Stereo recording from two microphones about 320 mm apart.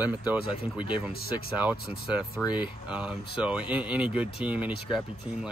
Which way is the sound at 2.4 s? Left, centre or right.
Centre.